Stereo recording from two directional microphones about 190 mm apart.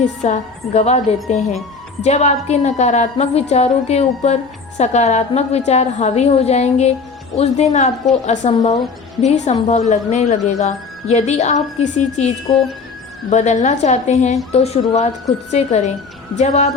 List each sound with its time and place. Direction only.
0.0 s a woman's voice: 40° left (ahead or behind)
13.3 s a woman's voice: 40° left (ahead or behind)